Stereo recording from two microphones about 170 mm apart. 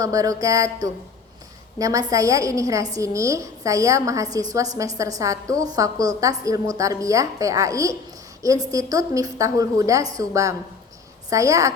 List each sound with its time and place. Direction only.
0.0 s a woman's voice: 20° right (ahead or behind)